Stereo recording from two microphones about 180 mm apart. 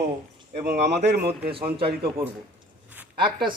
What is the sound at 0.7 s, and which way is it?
Speech, 40° right (ahead or behind).